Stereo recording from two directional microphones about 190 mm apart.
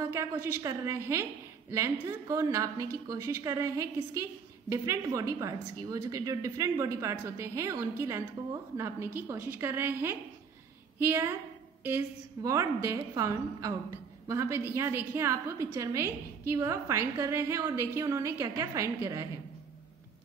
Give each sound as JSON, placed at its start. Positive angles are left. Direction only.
{"t": 0.0, "sound": "a woman's voice", "side_deg": -15}
{"t": 12.4, "sound": "a woman's voice", "side_deg": -15}